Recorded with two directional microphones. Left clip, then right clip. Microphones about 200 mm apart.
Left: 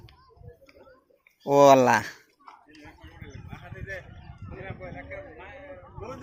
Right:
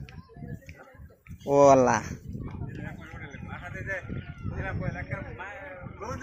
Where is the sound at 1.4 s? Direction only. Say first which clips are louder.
Left 2 dB; 20° left (ahead or behind).